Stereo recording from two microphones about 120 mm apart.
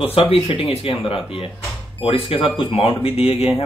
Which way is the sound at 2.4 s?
10° right (ahead or behind).